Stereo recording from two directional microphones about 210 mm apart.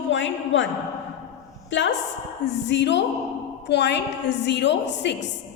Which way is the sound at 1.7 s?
60° left (ahead or behind).